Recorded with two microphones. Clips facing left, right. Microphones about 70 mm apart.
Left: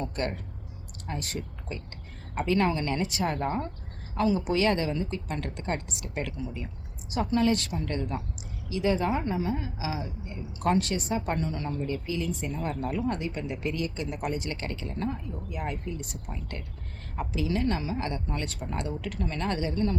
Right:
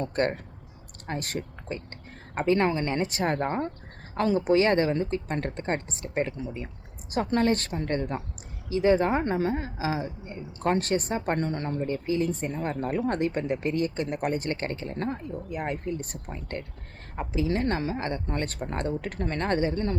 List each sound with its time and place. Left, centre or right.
0.0 s a woman's voice: right
4.4 s a woman's voice: right
9.2 s a woman's voice: right